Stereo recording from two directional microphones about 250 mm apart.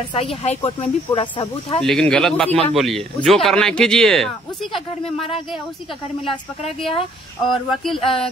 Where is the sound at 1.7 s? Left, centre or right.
Centre.